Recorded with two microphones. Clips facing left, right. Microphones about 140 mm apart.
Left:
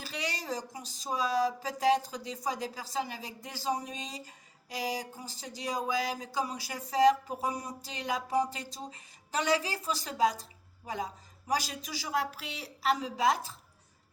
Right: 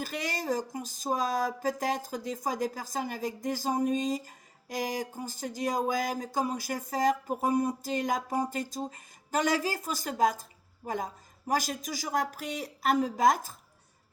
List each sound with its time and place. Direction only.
0.0 s speech: 45° right (ahead or behind)